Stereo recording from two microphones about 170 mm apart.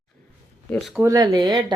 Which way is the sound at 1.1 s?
25° right (ahead or behind).